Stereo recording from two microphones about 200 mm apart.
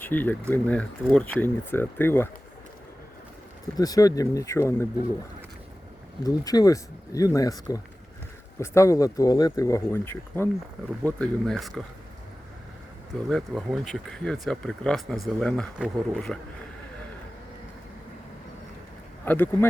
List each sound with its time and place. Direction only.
0.0 s speech: 10° left (ahead or behind)
3.8 s speech: 20° left (ahead or behind)
6.2 s speech: 20° left (ahead or behind); by 11.8 s centre (ahead or behind)
13.2 s speech: centre (ahead or behind)
19.2 s speech: 10° left (ahead or behind)